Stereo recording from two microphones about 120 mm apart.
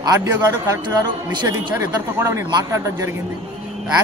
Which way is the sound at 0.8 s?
40° right (ahead or behind).